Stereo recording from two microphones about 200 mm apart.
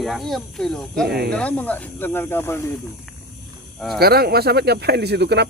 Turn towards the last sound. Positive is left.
turn(degrees=-55)  # may be behind; listen again after turning